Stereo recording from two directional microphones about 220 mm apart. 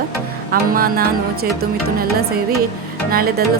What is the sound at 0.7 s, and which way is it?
Speech, 40° right (ahead or behind).